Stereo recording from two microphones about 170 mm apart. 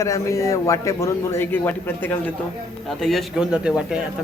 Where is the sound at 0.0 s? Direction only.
20° left (ahead or behind).